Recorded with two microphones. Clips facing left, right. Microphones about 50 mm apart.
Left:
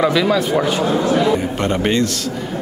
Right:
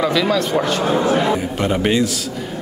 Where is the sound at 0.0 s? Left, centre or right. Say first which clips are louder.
Left 2 dB; centre.